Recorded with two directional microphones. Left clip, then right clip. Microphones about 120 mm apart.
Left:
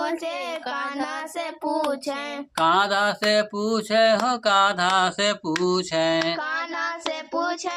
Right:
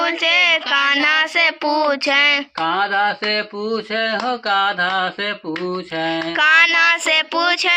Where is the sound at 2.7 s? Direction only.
40° left (ahead or behind).